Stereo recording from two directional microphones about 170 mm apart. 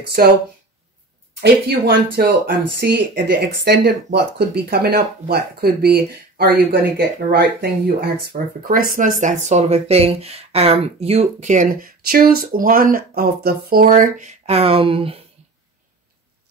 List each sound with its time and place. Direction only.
0.0 s speech: 65° right (ahead or behind)
1.4 s speech: 70° right (ahead or behind); by 15.1 s 30° right (ahead or behind)